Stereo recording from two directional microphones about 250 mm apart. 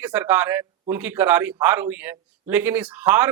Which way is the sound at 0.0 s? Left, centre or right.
Centre.